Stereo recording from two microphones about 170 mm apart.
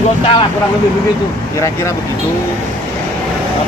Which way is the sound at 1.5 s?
15° left (ahead or behind).